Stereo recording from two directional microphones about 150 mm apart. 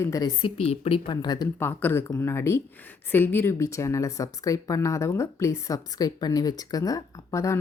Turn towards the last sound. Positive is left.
turn(degrees=20)  # may be behind; listen again after turning